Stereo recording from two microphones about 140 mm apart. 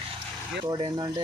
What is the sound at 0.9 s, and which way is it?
Speech, 30° right (ahead or behind).